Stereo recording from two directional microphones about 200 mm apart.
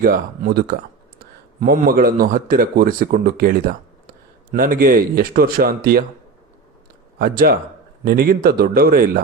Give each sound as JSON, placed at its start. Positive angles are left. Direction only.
{"t": 0.0, "sound": "speech", "side_deg": -45}
{"t": 7.2, "sound": "speech", "side_deg": -50}